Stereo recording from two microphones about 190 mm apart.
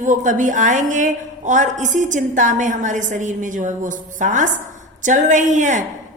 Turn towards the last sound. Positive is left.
turn(degrees=-40)  # may be behind; listen again after turning